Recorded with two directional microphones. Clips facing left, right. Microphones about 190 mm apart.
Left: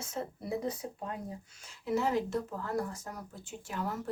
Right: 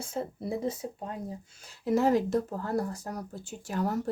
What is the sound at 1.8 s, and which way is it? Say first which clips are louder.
Speech: right 6 dB; 40° right (ahead or behind).